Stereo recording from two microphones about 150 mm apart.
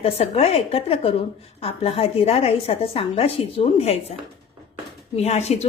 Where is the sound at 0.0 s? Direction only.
40° left (ahead or behind).